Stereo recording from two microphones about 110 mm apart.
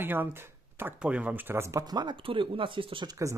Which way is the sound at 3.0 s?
30° right (ahead or behind).